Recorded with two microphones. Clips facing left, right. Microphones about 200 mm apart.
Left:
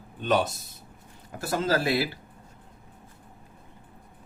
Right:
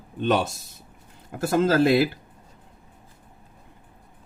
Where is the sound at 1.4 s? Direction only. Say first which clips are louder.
Right 6 dB; 50° right (ahead or behind).